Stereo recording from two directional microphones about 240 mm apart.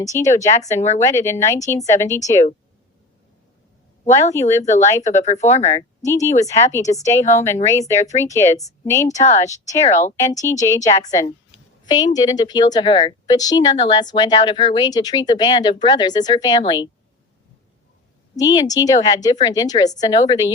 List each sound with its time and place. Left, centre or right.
0.0 s a woman's voice: centre
0.8 s speech: left
1.0 s a woman's voice: centre
4.0 s speech: left
4.4 s a woman's voice: centre
4.6 s speech: left
4.9 s a woman's voice: centre
5.1 s speech: left
6.1 s a woman's voice: centre
9.0 s speech: left
10.2 s a woman's voice: centre
18.3 s a woman's voice: centre